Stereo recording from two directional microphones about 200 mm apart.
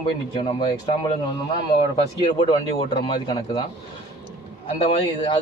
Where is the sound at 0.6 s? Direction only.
20° left (ahead or behind).